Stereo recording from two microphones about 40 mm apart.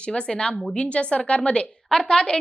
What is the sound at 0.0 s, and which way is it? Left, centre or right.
Speech, left.